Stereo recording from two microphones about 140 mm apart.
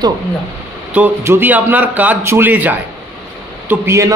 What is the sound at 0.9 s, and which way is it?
A man's voice, 15° right (ahead or behind).